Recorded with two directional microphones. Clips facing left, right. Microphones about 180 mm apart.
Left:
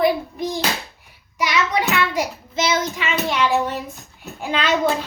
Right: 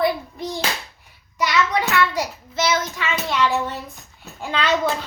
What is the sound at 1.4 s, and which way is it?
Child singing, 15° left (ahead or behind).